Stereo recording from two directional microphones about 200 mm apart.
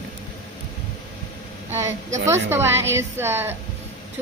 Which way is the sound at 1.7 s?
15° right (ahead or behind).